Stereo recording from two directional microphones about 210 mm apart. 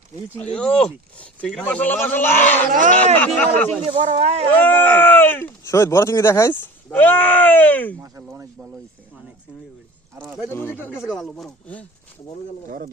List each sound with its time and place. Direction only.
0.3 s speech: 5° left (ahead or behind)
3.9 s speech: 35° right (ahead or behind)
4.6 s speech: 10° left (ahead or behind)
8.0 s speech: 15° right (ahead or behind)
10.2 s speech: centre (ahead or behind)
10.5 s speech: 10° left (ahead or behind)
12.6 s speech: 45° right (ahead or behind)